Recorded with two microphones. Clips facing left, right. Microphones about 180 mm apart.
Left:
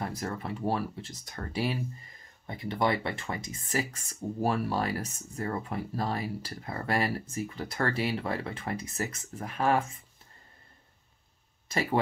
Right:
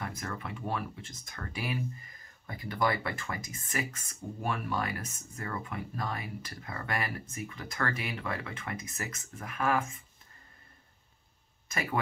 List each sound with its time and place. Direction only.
0.0 s speech: 30° left (ahead or behind)
11.7 s speech: 30° left (ahead or behind)